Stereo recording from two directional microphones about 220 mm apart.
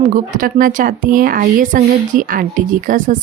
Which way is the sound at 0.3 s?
40° right (ahead or behind).